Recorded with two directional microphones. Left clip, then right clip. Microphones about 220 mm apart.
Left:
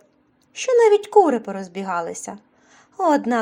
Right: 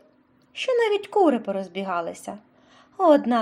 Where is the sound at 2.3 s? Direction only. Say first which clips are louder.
Left 1 dB; 25° left (ahead or behind).